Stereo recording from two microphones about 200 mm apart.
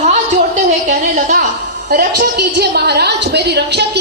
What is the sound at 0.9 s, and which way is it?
A woman's voice, 50° right (ahead or behind).